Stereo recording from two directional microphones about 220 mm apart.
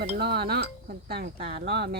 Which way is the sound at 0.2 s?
45° right (ahead or behind).